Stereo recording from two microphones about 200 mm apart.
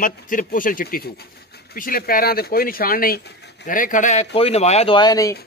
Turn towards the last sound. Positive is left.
turn(degrees=15)  # may be behind; listen again after turning